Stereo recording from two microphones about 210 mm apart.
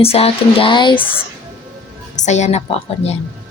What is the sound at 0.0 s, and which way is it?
Speech, 30° left (ahead or behind).